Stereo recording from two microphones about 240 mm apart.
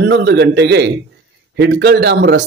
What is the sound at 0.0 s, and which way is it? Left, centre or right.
Speech, right.